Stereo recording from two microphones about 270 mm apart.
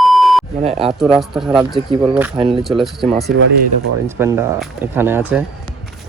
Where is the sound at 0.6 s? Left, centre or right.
Right.